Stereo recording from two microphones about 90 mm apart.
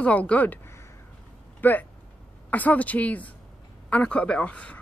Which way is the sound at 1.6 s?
20° left (ahead or behind).